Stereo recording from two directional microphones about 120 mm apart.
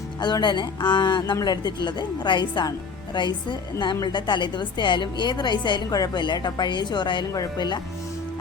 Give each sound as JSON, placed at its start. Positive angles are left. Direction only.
{"t": 0.2, "sound": "a woman's voice", "side_deg": 35}